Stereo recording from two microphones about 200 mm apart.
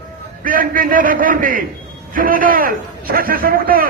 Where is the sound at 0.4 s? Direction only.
45° right (ahead or behind).